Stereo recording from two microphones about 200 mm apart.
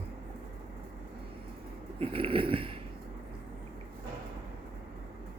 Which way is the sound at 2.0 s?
25° right (ahead or behind).